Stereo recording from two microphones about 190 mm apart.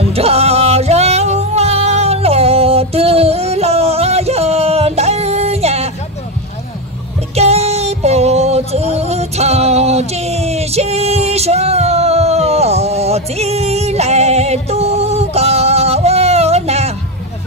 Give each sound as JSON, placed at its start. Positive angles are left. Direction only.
{"t": 0.0, "sound": "music", "side_deg": -30}
{"t": 7.3, "sound": "music", "side_deg": -35}
{"t": 8.9, "sound": "a sound", "side_deg": -35}